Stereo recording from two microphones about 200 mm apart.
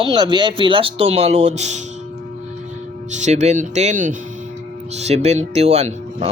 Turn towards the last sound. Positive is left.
turn(degrees=-35)  # may be behind; listen again after turning